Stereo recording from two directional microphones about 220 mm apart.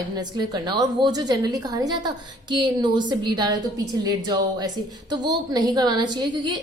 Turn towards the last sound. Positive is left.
turn(degrees=-20)  # may be behind; listen again after turning